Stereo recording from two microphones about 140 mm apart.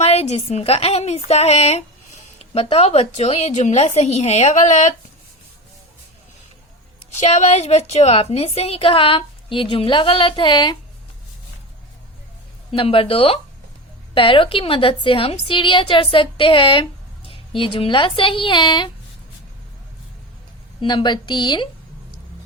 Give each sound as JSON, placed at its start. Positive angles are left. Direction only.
{"t": 0.0, "sound": "a woman's voice", "side_deg": 50}
{"t": 7.2, "sound": "a woman's voice", "side_deg": 55}
{"t": 12.7, "sound": "a woman's voice", "side_deg": 40}
{"t": 20.8, "sound": "a woman's voice", "side_deg": 35}